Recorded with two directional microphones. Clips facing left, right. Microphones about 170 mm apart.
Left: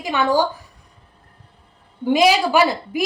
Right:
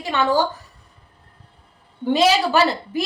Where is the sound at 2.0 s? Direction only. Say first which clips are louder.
Left 1 dB; 15° left (ahead or behind).